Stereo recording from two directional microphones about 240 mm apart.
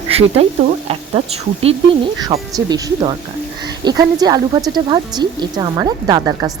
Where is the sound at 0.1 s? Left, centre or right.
Right.